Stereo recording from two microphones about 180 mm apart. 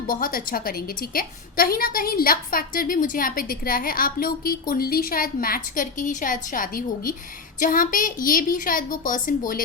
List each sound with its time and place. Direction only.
0.1 s a woman's voice: 50° left (ahead or behind)